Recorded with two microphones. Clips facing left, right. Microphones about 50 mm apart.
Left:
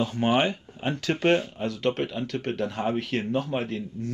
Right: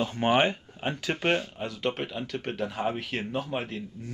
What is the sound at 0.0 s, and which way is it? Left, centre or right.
Speech, right.